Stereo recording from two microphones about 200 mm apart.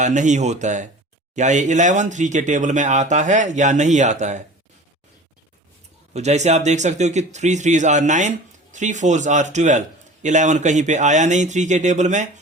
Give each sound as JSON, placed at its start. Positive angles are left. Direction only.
{"t": 0.0, "sound": "speech", "side_deg": -35}
{"t": 6.1, "sound": "speech", "side_deg": -35}